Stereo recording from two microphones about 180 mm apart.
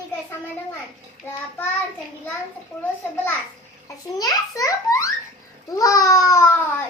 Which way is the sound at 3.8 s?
20° left (ahead or behind).